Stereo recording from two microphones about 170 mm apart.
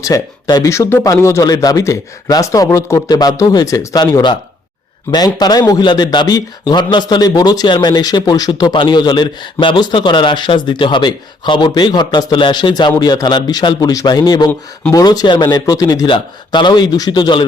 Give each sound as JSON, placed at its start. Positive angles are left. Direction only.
{"t": 0.0, "sound": "a man's voice", "side_deg": 20}